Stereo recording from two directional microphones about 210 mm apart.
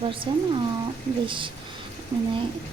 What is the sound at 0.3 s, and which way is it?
Speech, 20° right (ahead or behind).